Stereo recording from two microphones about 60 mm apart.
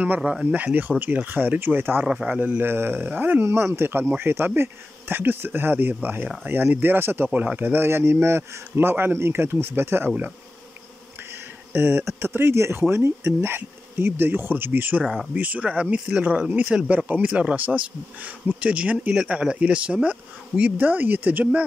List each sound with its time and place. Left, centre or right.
0.0 s speech: right
0.7 s speech: right
2.0 s speech: centre
2.7 s speech: right
3.4 s speech: right
11.7 s speech: right